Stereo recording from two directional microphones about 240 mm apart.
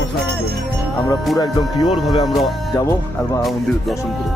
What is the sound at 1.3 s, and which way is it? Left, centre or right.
Speech, centre.